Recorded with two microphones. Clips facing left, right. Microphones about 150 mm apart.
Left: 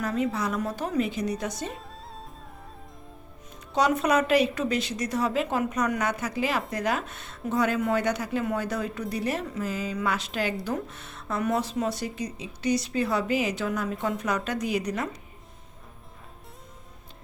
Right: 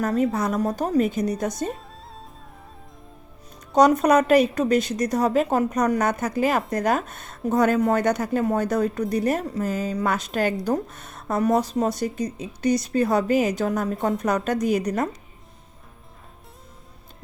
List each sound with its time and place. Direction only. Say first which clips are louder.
0.0 s a woman's voice: right 5 dB; 45° right (ahead or behind)
3.7 s a woman's voice: right 7 dB; 45° right (ahead or behind)